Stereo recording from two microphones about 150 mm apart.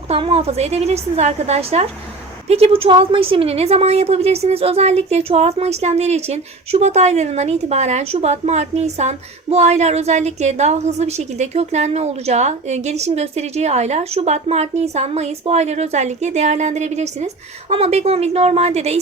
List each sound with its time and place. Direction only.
0.1 s speech: 40° right (ahead or behind)